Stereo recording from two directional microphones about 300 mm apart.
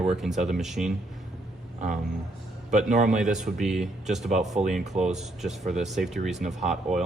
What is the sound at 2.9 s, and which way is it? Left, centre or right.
Speech, right.